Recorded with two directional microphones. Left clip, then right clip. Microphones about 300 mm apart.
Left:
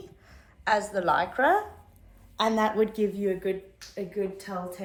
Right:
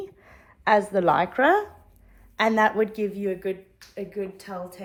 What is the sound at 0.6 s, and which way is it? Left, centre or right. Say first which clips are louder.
A woman's voice: right 5 dB; centre.